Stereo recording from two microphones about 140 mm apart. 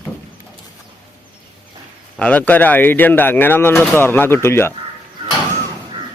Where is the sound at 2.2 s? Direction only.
10° left (ahead or behind).